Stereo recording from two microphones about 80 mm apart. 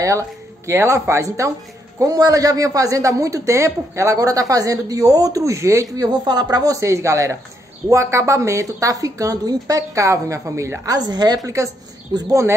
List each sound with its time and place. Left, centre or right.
0.0 s a woman's voice: right
5.9 s speech: right
6.5 s a woman's voice: right
11.0 s a woman's voice: right